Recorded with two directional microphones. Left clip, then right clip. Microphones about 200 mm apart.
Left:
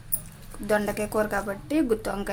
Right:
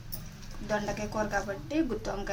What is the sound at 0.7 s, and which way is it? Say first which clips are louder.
A woman's voice: left 7 dB; 55° left (ahead or behind).